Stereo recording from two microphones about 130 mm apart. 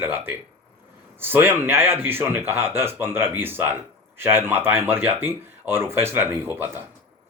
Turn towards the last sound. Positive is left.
turn(degrees=-15)  # may be behind; listen again after turning